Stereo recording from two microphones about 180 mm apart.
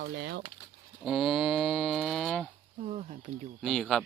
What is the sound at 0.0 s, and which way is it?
Speech, 70° right (ahead or behind).